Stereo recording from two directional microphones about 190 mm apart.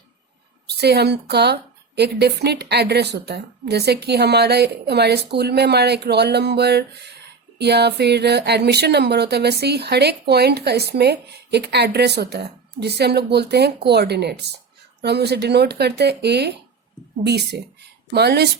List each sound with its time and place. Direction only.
0.7 s a woman's voice: 60° right (ahead or behind)